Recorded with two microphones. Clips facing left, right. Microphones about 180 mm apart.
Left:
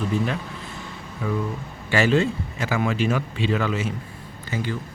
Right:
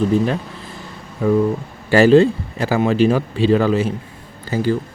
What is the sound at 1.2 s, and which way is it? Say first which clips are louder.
Speech: right 11 dB; 40° right (ahead or behind).